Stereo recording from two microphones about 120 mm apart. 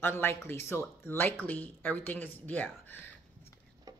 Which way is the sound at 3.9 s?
35° right (ahead or behind).